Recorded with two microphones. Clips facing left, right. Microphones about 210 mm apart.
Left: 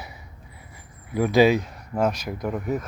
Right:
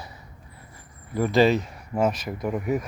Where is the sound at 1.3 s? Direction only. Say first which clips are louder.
Left 2 dB; centre (ahead or behind).